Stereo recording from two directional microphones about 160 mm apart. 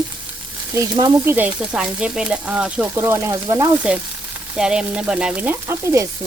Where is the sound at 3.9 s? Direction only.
5° right (ahead or behind).